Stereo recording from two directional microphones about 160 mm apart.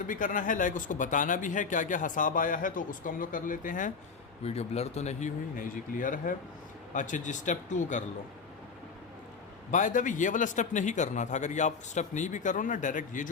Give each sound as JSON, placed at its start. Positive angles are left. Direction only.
{"t": 0.0, "sound": "speech", "side_deg": 55}
{"t": 4.4, "sound": "a man's voice", "side_deg": 40}
{"t": 9.7, "sound": "a man's voice", "side_deg": 55}